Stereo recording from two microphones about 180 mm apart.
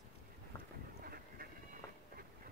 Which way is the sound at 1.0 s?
55° right (ahead or behind).